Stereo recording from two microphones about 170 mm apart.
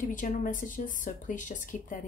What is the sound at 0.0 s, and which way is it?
Speech, 50° left (ahead or behind).